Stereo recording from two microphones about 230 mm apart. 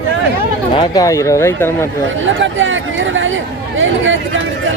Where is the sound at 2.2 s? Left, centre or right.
Right.